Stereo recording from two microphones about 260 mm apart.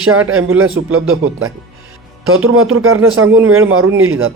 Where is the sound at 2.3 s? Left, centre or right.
Right.